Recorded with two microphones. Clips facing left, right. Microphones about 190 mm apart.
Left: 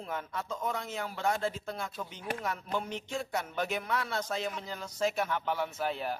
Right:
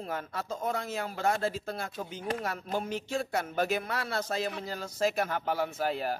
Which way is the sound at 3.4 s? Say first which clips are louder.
Right 4 dB; 45° right (ahead or behind).